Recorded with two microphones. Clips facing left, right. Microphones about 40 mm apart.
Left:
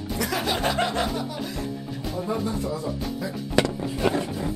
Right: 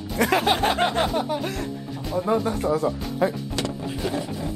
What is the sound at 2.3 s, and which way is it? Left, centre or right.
Speech, right.